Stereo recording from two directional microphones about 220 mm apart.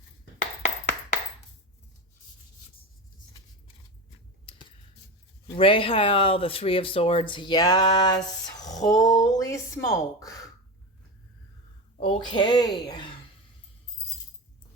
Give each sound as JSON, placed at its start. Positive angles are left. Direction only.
{"t": 4.4, "sound": "a sound", "side_deg": 20}
{"t": 5.5, "sound": "speech", "side_deg": 25}
{"t": 11.9, "sound": "speech", "side_deg": 25}